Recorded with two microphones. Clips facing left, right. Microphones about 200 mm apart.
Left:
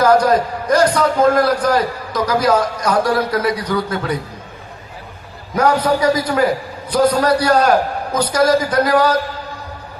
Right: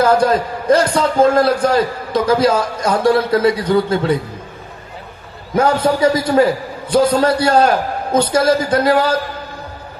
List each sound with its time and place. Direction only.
0.0 s a man's voice: 30° right (ahead or behind)
5.5 s a man's voice: 25° right (ahead or behind)